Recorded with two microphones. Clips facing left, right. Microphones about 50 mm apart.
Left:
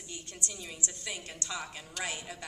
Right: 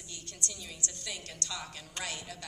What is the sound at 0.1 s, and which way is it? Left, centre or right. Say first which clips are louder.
A woman's voice: left 1 dB; centre.